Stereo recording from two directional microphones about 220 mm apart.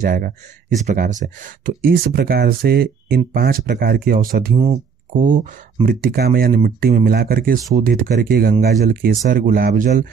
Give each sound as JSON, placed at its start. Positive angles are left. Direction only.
{"t": 0.0, "sound": "speech", "side_deg": -40}